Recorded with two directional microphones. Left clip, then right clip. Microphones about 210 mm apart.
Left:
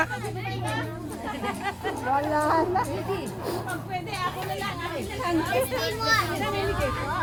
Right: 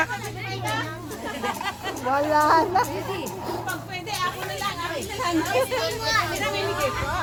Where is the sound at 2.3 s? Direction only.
55° right (ahead or behind).